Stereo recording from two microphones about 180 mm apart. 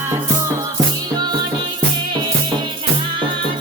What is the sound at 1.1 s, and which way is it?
Music, 25° right (ahead or behind).